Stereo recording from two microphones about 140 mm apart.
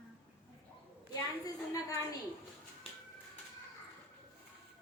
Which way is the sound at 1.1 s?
25° left (ahead or behind).